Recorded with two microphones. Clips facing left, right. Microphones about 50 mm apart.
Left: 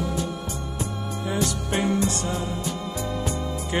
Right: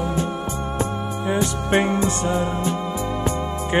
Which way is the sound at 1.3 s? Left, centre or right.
Right.